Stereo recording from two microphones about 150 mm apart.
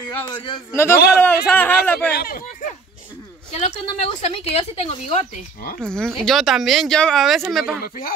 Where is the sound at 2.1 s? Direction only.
75° left (ahead or behind).